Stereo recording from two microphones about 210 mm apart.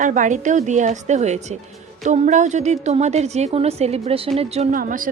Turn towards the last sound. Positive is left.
turn(degrees=-40)  # may be behind; listen again after turning